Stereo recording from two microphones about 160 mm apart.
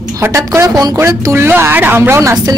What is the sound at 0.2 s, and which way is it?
Speech, 15° right (ahead or behind).